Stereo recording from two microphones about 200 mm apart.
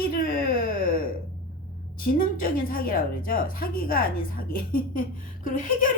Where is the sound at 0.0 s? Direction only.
45° left (ahead or behind).